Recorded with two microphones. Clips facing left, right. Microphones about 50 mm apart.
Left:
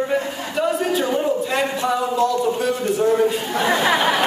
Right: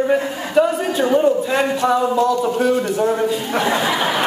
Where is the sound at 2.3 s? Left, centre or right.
Centre.